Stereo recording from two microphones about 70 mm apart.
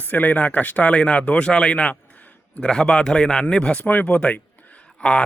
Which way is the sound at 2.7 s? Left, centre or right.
Centre.